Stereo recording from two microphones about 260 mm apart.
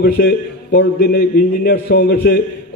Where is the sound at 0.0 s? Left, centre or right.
Left.